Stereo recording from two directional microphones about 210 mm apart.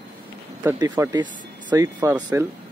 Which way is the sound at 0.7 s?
15° right (ahead or behind).